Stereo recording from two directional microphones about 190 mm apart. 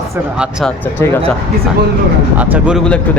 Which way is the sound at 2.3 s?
10° right (ahead or behind).